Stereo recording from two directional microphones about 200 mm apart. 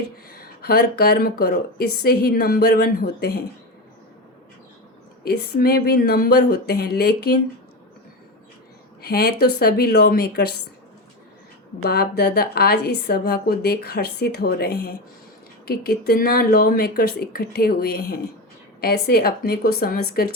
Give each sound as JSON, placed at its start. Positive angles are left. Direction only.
{"t": 0.3, "sound": "a woman's voice", "side_deg": 50}
{"t": 5.2, "sound": "a woman's voice", "side_deg": 50}
{"t": 9.0, "sound": "a woman's voice", "side_deg": 50}
{"t": 11.8, "sound": "a woman's voice", "side_deg": 50}